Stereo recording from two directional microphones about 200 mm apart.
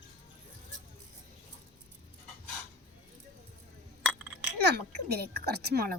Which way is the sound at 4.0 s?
5° right (ahead or behind).